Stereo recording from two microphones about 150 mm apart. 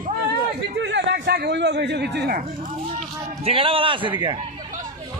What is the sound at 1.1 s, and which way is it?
A man's voice, 90° right.